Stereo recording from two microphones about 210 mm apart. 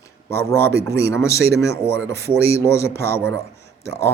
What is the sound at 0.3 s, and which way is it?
A man's voice, 10° left (ahead or behind).